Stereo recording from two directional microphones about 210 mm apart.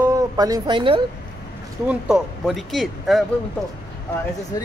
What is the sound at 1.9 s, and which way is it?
Speech, 5° right (ahead or behind).